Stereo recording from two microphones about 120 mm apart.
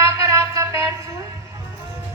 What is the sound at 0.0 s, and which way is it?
Music, 25° right (ahead or behind).